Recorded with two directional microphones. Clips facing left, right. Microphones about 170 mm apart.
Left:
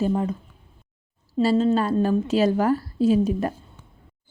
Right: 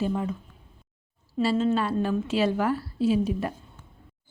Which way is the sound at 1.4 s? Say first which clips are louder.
Left 4 dB; 40° left (ahead or behind).